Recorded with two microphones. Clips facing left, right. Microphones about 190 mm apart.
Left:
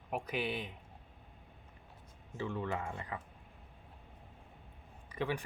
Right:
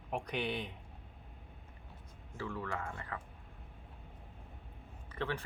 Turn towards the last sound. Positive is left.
turn(degrees=15)  # may be behind; listen again after turning